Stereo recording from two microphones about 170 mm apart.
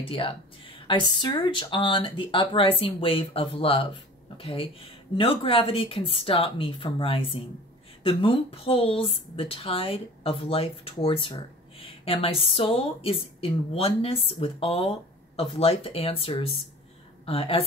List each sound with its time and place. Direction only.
0.1 s speech: 30° left (ahead or behind)